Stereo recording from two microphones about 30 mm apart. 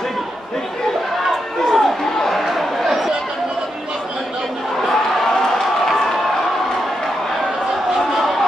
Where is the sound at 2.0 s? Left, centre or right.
Centre.